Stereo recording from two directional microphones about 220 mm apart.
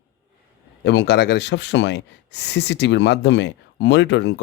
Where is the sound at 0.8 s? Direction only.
50° left (ahead or behind).